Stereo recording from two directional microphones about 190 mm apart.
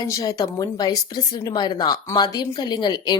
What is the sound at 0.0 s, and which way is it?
A woman's voice, 20° left (ahead or behind).